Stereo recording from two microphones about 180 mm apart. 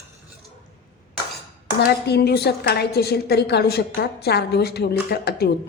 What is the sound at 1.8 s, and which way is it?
A woman's voice, 65° left (ahead or behind).